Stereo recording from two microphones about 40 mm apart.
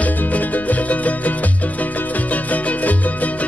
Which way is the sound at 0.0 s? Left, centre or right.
Left.